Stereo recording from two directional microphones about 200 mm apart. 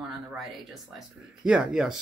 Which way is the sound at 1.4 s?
5° right (ahead or behind).